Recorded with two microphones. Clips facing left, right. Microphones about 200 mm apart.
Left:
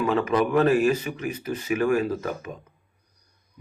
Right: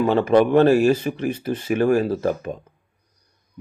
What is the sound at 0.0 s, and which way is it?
A man's voice, 30° right (ahead or behind).